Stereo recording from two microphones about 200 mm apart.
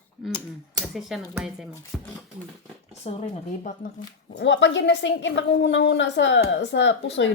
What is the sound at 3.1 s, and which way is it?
Speech, 35° left (ahead or behind).